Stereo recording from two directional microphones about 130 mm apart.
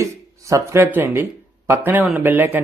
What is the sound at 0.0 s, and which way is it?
Speech, 25° right (ahead or behind).